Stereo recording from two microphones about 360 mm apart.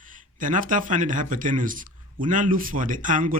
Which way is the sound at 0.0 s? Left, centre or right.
Right.